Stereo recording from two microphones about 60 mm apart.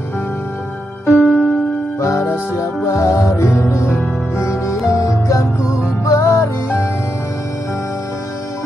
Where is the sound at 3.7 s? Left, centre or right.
Left.